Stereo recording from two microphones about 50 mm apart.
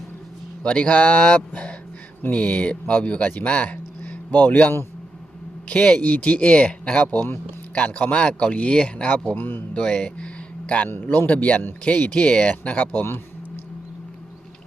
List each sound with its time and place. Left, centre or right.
0.6 s speech: left
5.6 s speech: left
9.3 s speech: left
9.8 s speech: left
10.8 s speech: left